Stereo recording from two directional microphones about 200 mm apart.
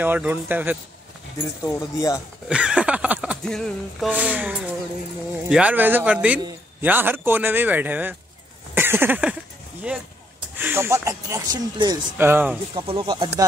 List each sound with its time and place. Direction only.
0.0 s speech: 10° right (ahead or behind)
1.6 s speech: 15° left (ahead or behind)
2.4 s speech: 5° right (ahead or behind)
8.7 s a sound: 10° right (ahead or behind)
9.9 s speech: 5° right (ahead or behind)
12.2 s speech: 10° right (ahead or behind)
12.7 s speech: 25° right (ahead or behind)